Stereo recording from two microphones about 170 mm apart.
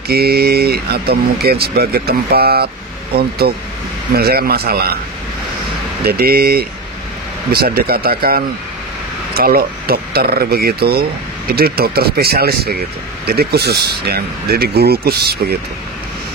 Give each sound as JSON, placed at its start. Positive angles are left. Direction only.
{"t": 0.1, "sound": "speech", "side_deg": -65}
{"t": 6.0, "sound": "speech", "side_deg": -65}